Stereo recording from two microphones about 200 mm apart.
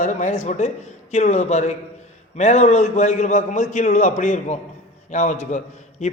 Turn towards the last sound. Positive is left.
turn(degrees=35)  # may be behind; listen again after turning